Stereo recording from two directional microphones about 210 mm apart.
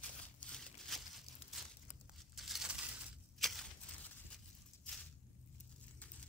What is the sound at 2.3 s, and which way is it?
Crushing, centre (ahead or behind).